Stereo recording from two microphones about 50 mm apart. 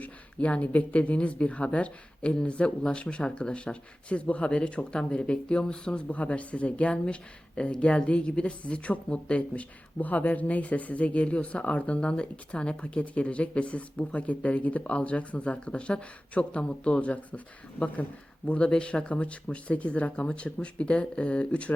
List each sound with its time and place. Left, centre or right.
0.0 s speech: left